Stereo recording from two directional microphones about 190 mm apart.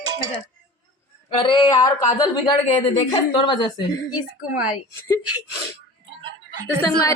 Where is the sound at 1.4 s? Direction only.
25° left (ahead or behind).